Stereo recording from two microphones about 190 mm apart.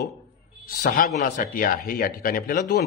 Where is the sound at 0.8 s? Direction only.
40° left (ahead or behind).